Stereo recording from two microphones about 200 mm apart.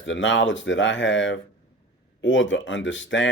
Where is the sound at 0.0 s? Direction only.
70° left (ahead or behind).